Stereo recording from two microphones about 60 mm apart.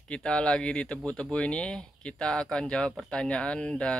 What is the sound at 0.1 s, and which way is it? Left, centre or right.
Speech, centre.